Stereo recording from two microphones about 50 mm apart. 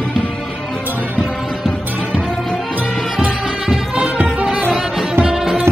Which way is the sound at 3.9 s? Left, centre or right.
Right.